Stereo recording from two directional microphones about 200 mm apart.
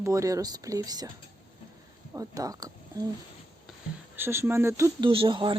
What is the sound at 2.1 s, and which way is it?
Speech, 20° right (ahead or behind).